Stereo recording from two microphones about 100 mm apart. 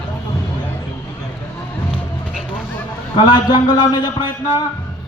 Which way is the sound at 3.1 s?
45° left (ahead or behind).